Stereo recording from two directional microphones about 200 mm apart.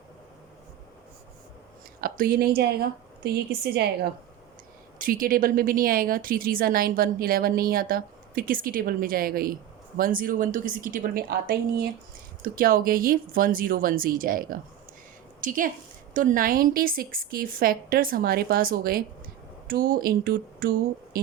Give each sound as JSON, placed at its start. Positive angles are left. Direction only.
{"t": 2.0, "sound": "speech", "side_deg": -45}
{"t": 4.9, "sound": "a woman's voice", "side_deg": -45}